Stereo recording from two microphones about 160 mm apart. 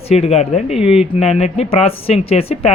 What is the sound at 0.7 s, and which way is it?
Speech, 5° right (ahead or behind).